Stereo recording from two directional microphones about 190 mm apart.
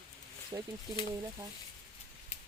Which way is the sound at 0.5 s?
20° right (ahead or behind).